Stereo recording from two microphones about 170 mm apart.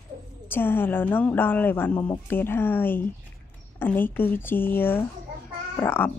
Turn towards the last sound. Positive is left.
turn(degrees=10)  # may be behind; listen again after turning